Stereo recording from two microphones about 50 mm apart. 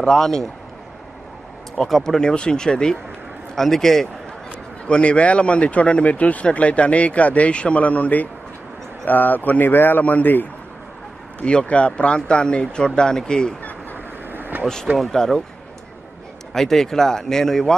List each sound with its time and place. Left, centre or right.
0.0 s speech: centre
1.9 s speech: centre
2.1 s speech: centre
4.5 s a man's voice: left
11.3 s a man's voice: left
14.3 s vehicle: right
15.0 s speech: centre
16.5 s speech: centre